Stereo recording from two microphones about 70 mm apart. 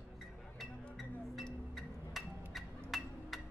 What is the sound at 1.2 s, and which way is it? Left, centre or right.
Music, centre.